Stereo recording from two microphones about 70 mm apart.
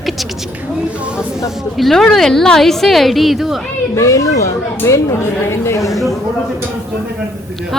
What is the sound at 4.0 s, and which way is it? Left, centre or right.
Speech, left.